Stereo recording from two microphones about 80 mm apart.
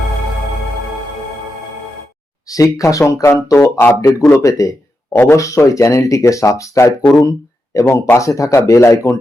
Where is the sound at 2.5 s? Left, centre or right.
Left.